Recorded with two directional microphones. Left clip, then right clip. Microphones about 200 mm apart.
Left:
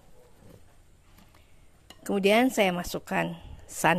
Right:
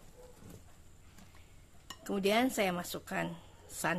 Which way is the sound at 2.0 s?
35° left (ahead or behind).